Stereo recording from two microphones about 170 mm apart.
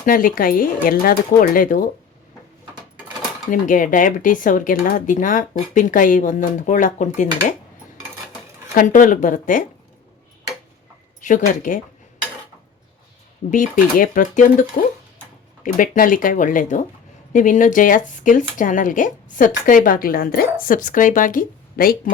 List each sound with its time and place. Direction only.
0.0 s speech: 55° left (ahead or behind)
3.5 s speech: 50° left (ahead or behind)
8.7 s speech: 50° left (ahead or behind)
11.2 s speech: 50° left (ahead or behind)
13.5 s speech: 55° left (ahead or behind)